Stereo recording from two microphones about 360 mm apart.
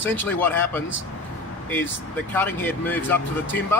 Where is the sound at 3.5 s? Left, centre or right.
Left.